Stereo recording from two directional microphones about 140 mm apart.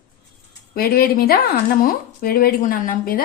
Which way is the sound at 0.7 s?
90° left.